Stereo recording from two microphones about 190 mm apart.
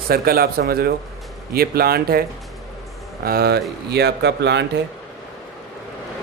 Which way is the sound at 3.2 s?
55° right (ahead or behind).